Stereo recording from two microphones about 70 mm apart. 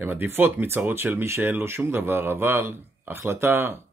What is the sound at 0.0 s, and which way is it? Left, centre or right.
Speech, right.